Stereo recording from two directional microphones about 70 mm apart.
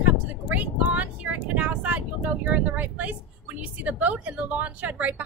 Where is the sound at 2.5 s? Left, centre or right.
Right.